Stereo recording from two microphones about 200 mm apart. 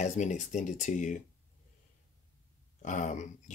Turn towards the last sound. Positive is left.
turn(degrees=35)  # may be behind; listen again after turning